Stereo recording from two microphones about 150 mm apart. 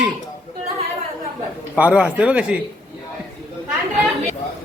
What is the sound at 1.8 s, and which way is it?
Speech, 10° right (ahead or behind).